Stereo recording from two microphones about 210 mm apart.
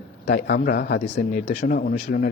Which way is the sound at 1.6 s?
45° left (ahead or behind).